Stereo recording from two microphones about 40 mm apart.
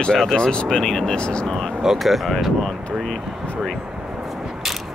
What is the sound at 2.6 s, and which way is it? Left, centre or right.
Speech, centre.